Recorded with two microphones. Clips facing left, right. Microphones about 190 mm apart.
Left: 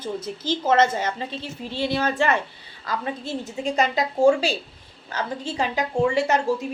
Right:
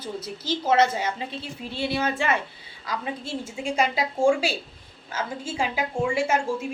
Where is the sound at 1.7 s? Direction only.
10° right (ahead or behind).